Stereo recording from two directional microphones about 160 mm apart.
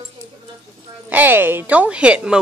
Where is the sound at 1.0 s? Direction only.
10° right (ahead or behind).